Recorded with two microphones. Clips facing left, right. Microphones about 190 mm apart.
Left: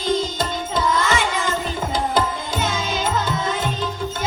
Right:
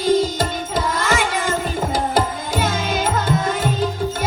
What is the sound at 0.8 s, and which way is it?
Child singing, 50° right (ahead or behind).